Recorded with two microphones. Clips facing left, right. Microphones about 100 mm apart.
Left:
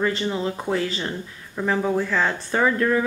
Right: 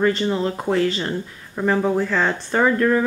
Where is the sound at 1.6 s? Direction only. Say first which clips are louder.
Right 3 dB; 5° right (ahead or behind).